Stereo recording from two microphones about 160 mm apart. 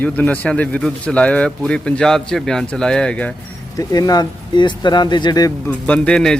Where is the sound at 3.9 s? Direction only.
25° left (ahead or behind).